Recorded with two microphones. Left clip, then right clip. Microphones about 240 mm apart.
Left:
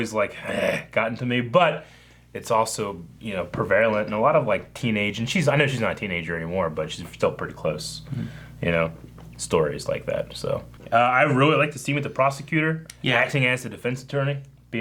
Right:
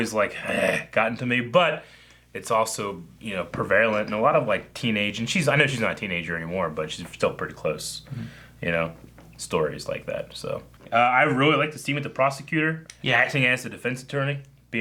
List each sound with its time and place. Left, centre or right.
0.0 s speech: left
7.3 s speech: left
8.6 s speech: left